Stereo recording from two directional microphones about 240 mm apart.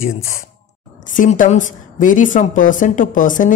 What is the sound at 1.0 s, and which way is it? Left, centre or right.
A woman's voice, left.